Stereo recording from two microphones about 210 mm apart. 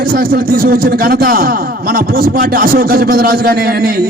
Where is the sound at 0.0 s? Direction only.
45° right (ahead or behind).